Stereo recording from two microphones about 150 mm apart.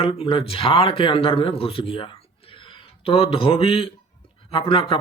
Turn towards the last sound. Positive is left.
turn(degrees=35)  # may be behind; listen again after turning